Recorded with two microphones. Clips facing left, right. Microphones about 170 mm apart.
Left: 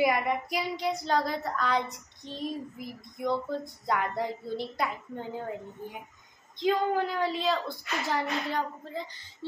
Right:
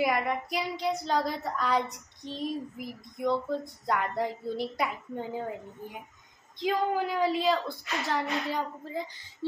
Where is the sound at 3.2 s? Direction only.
Centre (ahead or behind).